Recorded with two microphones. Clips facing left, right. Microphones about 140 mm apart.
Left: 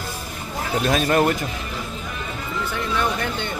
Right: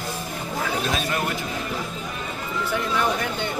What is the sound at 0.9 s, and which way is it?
Speech, 50° left (ahead or behind).